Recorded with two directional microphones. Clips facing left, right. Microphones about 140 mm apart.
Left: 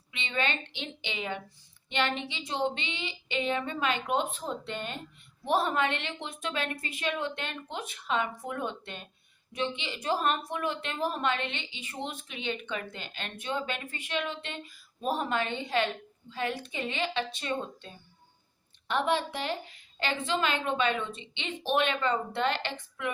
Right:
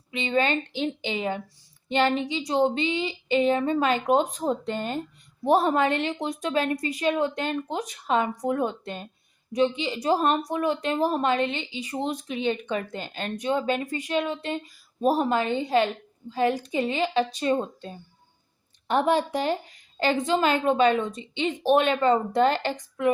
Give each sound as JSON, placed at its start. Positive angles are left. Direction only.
{"t": 0.1, "sound": "a woman's voice", "side_deg": -40}